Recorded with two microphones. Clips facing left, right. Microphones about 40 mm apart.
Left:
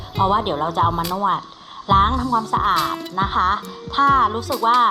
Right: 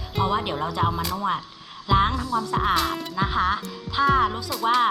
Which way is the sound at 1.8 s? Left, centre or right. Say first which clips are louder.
Left 5 dB; left.